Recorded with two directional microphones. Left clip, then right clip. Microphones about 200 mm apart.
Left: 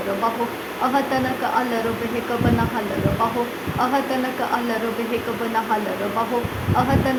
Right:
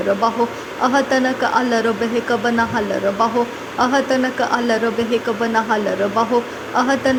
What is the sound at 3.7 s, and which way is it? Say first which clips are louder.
Speech: right 5 dB; 20° right (ahead or behind).